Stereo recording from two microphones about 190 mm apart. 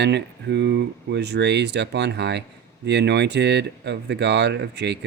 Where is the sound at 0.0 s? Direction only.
65° right (ahead or behind).